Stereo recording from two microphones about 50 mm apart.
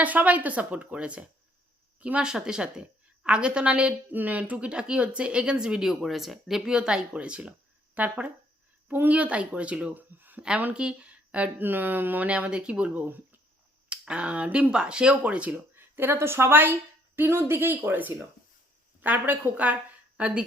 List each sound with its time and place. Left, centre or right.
0.0 s speech: right
2.2 s speech: centre
4.1 s speech: right; by 6.6 s centre
6.7 s speech: centre
9.9 s speech: right
10.8 s speech: right
11.6 s speech: right
12.3 s speech: right
14.1 s speech: right
15.5 s speech: right
19.7 s a sound: right